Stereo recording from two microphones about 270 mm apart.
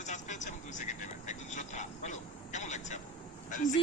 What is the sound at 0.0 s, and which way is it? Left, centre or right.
Vehicle, left.